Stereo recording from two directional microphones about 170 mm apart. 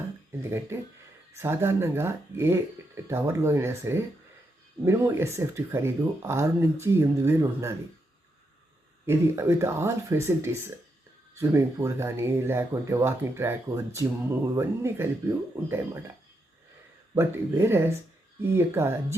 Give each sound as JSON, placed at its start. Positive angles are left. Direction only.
{"t": 0.3, "sound": "speech", "side_deg": -15}
{"t": 9.0, "sound": "speech", "side_deg": -15}
{"t": 17.2, "sound": "speech", "side_deg": -15}